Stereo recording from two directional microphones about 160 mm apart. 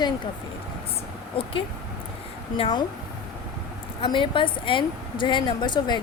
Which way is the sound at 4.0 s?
30° left (ahead or behind).